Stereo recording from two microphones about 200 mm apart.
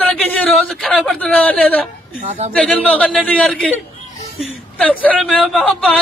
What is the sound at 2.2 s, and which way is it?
Speech, 35° right (ahead or behind).